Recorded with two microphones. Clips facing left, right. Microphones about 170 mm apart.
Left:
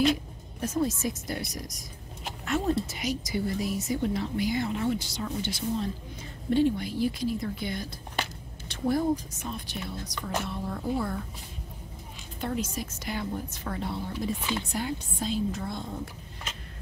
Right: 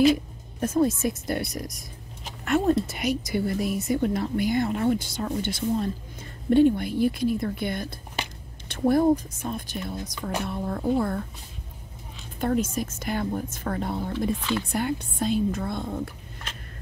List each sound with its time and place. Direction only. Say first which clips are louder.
0.6 s a woman's voice: right 5 dB; 55° right (ahead or behind)
12.4 s a woman's voice: right 7 dB; 50° right (ahead or behind)